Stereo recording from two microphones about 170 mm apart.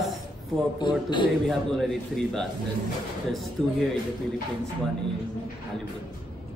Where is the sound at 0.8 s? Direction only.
25° left (ahead or behind).